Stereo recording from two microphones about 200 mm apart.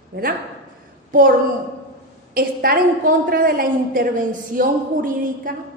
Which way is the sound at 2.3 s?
45° right (ahead or behind).